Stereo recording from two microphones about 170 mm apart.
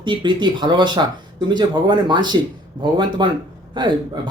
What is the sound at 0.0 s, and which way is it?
A man's voice, 25° right (ahead or behind).